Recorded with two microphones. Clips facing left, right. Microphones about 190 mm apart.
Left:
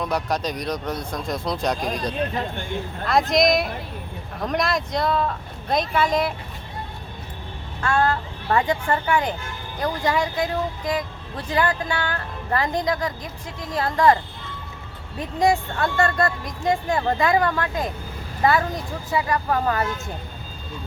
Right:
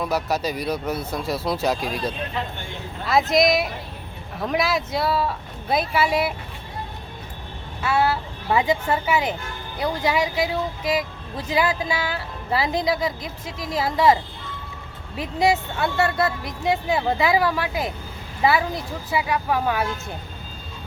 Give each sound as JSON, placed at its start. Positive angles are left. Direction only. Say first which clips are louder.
{"t": 0.0, "sound": "speech", "louder": "right 1 dB", "side_deg": -5}
{"t": 7.8, "sound": "speech", "louder": "even", "side_deg": -5}